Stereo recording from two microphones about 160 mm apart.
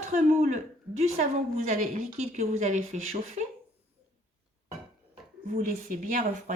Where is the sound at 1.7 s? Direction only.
45° right (ahead or behind).